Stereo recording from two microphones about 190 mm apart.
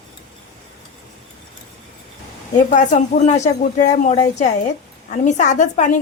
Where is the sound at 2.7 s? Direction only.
40° left (ahead or behind).